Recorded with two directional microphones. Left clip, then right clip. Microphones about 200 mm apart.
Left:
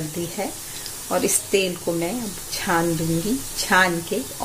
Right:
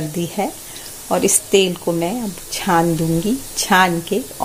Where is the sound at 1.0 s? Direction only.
25° right (ahead or behind).